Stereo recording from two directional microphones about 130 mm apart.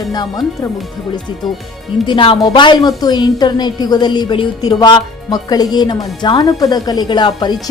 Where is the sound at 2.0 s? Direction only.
40° left (ahead or behind).